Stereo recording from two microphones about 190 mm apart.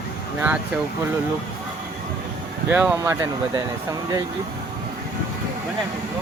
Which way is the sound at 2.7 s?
10° right (ahead or behind).